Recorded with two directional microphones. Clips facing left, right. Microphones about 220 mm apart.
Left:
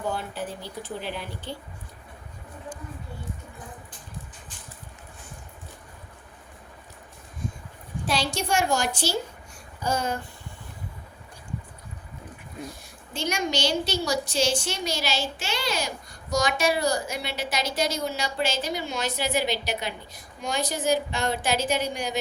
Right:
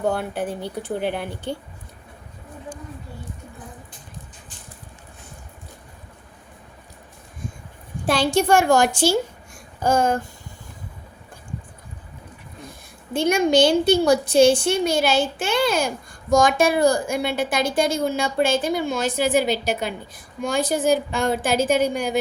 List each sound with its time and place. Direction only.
0.0 s speech: 60° right (ahead or behind)
8.0 s a woman's voice: 55° right (ahead or behind)
13.1 s a woman's voice: 55° right (ahead or behind)